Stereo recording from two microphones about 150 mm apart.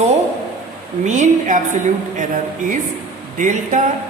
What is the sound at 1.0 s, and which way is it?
A woman's voice, 55° right (ahead or behind).